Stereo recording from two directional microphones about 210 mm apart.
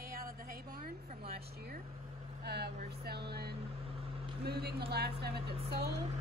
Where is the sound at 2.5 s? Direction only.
50° right (ahead or behind).